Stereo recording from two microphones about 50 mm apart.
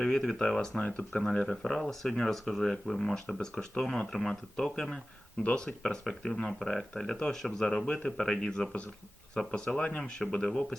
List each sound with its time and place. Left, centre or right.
0.0 s speech: centre
0.8 s speech: left
1.5 s speech: centre
5.4 s speech: left
5.6 s speech: centre